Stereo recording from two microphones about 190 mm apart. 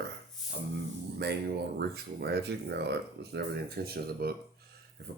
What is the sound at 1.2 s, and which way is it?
Speech, 60° right (ahead or behind).